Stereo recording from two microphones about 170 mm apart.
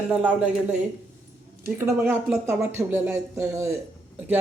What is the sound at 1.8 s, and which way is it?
Speech, 15° right (ahead or behind).